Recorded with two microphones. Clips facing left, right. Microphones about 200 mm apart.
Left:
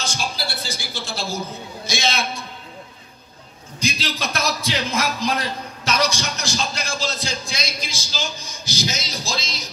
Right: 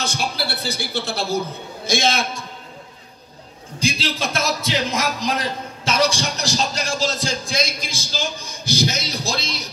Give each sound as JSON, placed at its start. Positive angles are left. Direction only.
{"t": 0.0, "sound": "a man's voice", "side_deg": -60}
{"t": 3.8, "sound": "a man's voice", "side_deg": -25}